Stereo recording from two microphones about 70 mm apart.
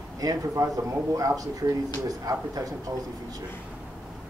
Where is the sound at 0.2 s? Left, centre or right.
Right.